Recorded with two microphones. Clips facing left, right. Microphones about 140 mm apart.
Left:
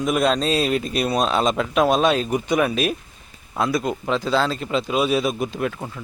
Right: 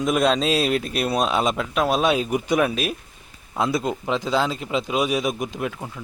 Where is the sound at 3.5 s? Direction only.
20° right (ahead or behind).